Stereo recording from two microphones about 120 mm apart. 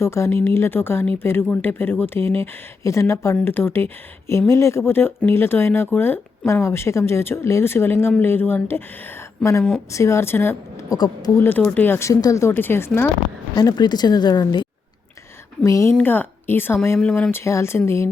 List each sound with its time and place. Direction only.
0.0 s speech: 20° left (ahead or behind)
10.9 s speech: 35° left (ahead or behind)
11.3 s speech: 15° left (ahead or behind)
13.6 s speech: 35° left (ahead or behind)
16.0 s a woman's voice: 15° left (ahead or behind)
17.0 s a woman's voice: 10° left (ahead or behind)
17.3 s speech: 25° left (ahead or behind)